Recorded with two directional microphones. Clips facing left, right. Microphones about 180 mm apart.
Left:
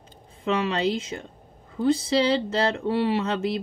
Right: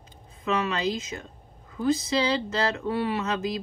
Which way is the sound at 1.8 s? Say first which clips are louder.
Left 3 dB; 30° left (ahead or behind).